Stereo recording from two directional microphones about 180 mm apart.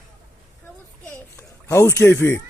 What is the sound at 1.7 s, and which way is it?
Speech, 15° left (ahead or behind).